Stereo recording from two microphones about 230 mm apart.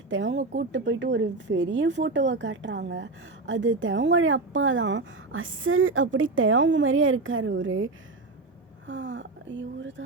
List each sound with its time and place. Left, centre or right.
0.1 s speech: right
8.9 s speech: right